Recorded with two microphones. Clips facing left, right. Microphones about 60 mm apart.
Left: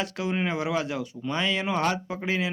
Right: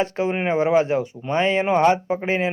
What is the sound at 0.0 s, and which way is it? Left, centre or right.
Speech, right.